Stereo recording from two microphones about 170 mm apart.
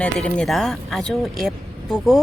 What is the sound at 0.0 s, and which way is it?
A woman's voice, 5° left (ahead or behind).